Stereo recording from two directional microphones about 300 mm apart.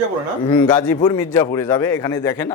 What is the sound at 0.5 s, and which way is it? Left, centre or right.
A man's voice, centre.